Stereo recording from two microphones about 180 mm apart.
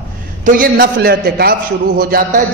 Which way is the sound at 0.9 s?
65° right (ahead or behind).